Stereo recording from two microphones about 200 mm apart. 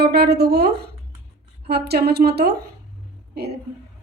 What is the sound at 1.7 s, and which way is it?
Speech, 55° right (ahead or behind).